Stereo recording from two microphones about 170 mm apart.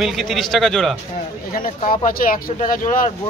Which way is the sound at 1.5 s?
50° left (ahead or behind).